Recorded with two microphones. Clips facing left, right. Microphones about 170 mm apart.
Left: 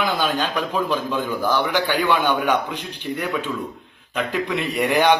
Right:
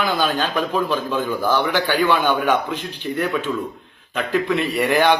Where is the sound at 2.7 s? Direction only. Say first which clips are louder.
Right 3 dB; 10° left (ahead or behind).